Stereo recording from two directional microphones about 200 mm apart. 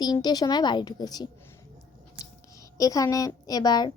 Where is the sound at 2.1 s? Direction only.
15° left (ahead or behind).